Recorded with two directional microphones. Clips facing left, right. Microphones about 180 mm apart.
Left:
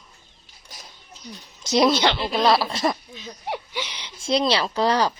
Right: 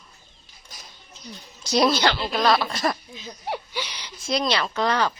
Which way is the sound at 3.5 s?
15° left (ahead or behind).